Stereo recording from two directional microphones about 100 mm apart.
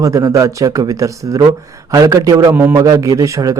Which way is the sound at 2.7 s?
35° right (ahead or behind).